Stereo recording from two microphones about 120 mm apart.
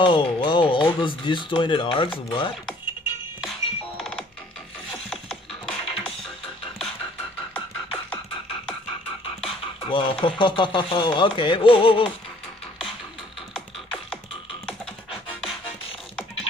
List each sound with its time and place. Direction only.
0.0 s speech: 40° left (ahead or behind)
3.4 s music: centre (ahead or behind)
9.4 s speech: 45° left (ahead or behind)